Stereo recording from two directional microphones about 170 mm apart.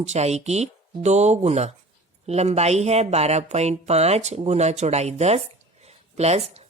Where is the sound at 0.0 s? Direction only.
40° right (ahead or behind).